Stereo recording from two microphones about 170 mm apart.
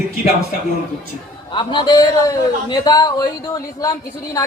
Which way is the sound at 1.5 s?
25° left (ahead or behind).